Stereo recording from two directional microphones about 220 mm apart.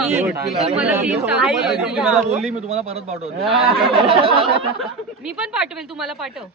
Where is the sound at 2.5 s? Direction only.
30° right (ahead or behind).